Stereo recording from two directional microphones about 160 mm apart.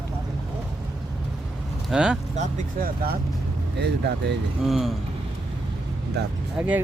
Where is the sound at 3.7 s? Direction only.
90° right.